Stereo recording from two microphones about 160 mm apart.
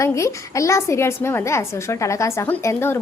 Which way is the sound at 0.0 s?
20° left (ahead or behind).